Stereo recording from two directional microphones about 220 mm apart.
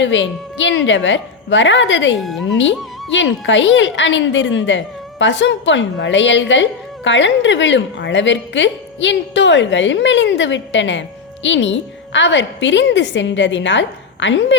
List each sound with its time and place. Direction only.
0.0 s a woman's voice: 55° left (ahead or behind)
2.1 s speech: centre (ahead or behind)
2.5 s a woman's voice: 55° left (ahead or behind)